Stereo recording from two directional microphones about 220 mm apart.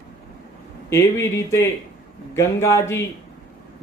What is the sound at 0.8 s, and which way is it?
Speech, 10° left (ahead or behind).